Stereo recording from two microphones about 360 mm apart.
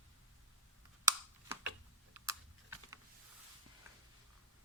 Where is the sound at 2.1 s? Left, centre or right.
Centre.